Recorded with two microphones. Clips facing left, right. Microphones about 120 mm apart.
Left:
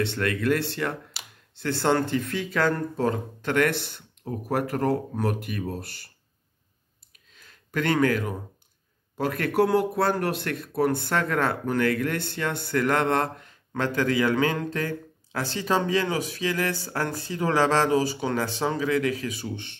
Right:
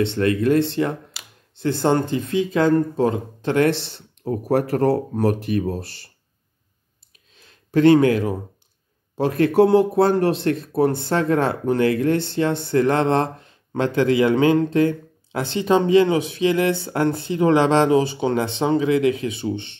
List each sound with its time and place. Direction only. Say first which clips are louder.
0.0 s speech: right 7 dB; 25° right (ahead or behind)
4.2 s speech: right 7 dB; 40° right (ahead or behind)
7.7 s speech: right 9 dB; 25° right (ahead or behind)